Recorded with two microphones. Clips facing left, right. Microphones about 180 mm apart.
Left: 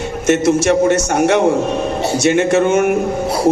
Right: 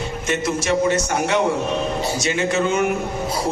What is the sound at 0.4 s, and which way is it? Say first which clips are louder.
A man's voice: left 5 dB; 55° left (ahead or behind).